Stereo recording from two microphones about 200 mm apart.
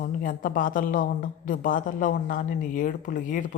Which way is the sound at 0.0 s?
45° left (ahead or behind).